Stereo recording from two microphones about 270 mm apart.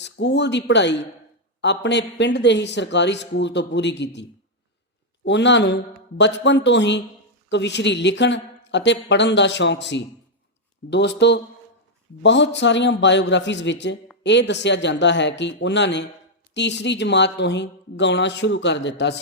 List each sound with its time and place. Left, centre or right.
0.0 s speech: left